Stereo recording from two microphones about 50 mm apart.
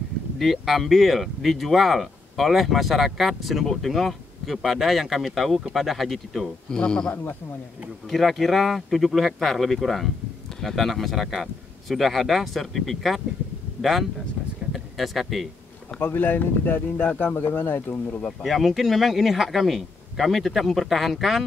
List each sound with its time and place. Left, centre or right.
0.4 s speech: centre
6.7 s speech: centre
8.1 s speech: centre
14.7 s a sound: centre
16.0 s speech: left
18.4 s speech: centre